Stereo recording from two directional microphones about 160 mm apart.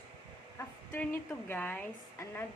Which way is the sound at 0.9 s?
15° left (ahead or behind).